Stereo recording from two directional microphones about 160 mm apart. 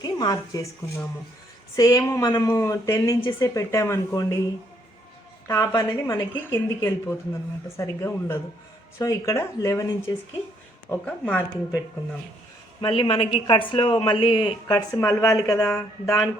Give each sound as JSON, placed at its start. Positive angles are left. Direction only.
{"t": 0.0, "sound": "a woman's voice", "side_deg": 25}
{"t": 5.5, "sound": "a woman's voice", "side_deg": 20}
{"t": 10.8, "sound": "speech", "side_deg": 10}
{"t": 12.8, "sound": "speech", "side_deg": 35}
{"t": 14.7, "sound": "a woman's voice", "side_deg": 20}